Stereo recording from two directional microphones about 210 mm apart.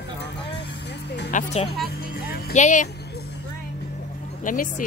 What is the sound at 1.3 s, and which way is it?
Speech, 30° left (ahead or behind).